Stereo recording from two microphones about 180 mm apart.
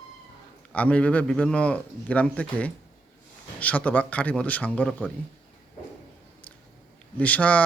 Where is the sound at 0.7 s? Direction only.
5° left (ahead or behind).